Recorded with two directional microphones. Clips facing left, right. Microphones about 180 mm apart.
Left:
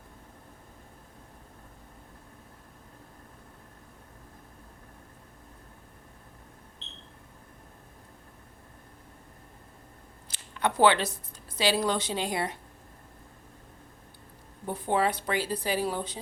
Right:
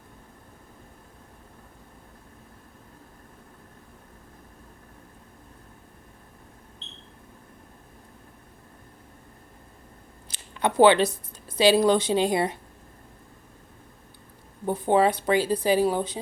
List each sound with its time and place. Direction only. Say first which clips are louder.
10.6 s a woman's voice: right 5 dB; 20° right (ahead or behind)
14.7 s a woman's voice: right 6 dB; 20° right (ahead or behind)